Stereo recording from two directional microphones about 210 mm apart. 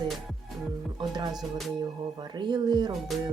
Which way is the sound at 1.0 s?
20° right (ahead or behind).